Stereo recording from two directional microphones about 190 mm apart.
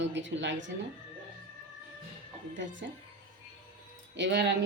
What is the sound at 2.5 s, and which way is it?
Speech, 75° right (ahead or behind).